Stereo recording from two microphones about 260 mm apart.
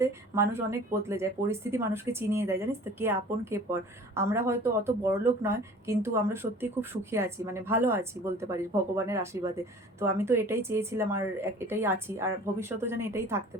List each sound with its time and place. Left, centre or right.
0.0 s speech: centre